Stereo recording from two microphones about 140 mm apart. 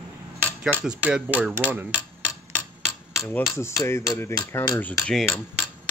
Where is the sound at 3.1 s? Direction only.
20° left (ahead or behind).